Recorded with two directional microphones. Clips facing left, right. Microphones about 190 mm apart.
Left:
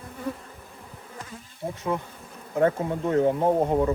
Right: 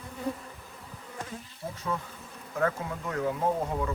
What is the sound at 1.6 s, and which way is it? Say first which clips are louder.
Bee: left 6 dB; 30° left (ahead or behind).